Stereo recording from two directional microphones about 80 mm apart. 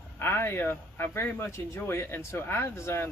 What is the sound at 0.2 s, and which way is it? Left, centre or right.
Speech, left.